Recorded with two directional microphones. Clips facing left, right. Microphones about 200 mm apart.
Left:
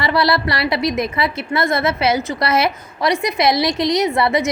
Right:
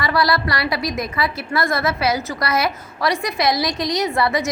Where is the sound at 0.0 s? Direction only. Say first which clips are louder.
Left 2 dB; 25° left (ahead or behind).